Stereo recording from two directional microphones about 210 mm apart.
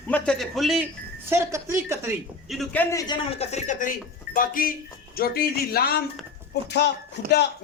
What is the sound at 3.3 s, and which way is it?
Speech, 30° left (ahead or behind).